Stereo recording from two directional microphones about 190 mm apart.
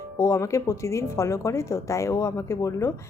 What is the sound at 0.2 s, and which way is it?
A woman's voice, 15° left (ahead or behind).